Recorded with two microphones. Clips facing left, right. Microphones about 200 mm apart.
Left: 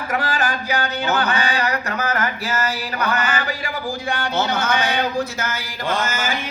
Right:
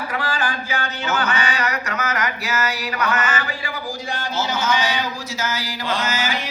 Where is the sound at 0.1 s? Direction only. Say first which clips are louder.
Left 5 dB; 45° left (ahead or behind).